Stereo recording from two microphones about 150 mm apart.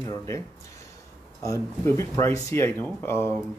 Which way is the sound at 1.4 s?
20° left (ahead or behind).